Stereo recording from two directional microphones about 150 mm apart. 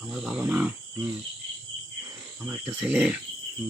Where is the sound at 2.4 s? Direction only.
10° right (ahead or behind).